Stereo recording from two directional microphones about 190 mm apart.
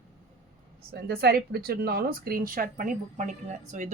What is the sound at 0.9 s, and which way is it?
Speech, 55° right (ahead or behind).